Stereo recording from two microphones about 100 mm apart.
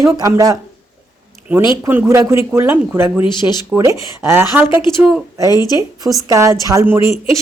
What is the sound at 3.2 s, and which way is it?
Speech, 50° left (ahead or behind).